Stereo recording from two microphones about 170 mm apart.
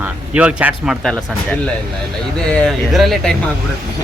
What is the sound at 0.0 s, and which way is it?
Speech, 10° right (ahead or behind).